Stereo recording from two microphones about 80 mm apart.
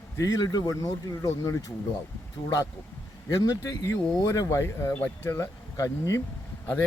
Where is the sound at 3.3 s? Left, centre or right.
Left.